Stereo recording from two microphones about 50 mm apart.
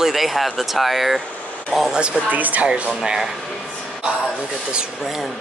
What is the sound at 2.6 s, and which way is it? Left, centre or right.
Speech, centre.